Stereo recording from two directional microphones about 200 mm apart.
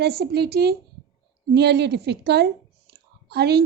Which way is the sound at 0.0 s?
50° right (ahead or behind).